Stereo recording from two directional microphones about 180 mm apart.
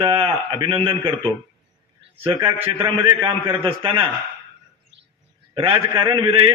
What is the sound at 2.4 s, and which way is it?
A man's voice, 30° right (ahead or behind).